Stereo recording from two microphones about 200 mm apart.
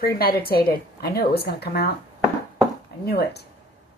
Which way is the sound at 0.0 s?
50° left (ahead or behind).